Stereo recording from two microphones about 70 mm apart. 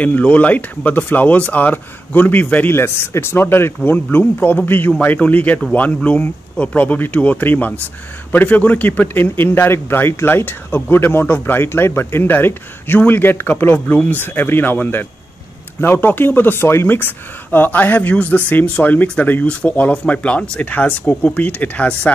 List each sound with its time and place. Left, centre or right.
0.0 s speech: left
3.9 s a man's voice: left